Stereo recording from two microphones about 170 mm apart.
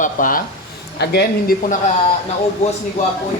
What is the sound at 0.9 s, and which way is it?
Speech, 75° left (ahead or behind).